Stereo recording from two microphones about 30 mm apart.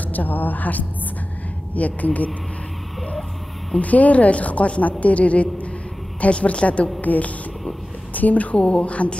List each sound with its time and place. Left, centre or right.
0.1 s a woman's voice: left
1.8 s a woman's voice: left
3.8 s a woman's voice: left
7.0 s a woman's voice: left
8.5 s a woman's voice: left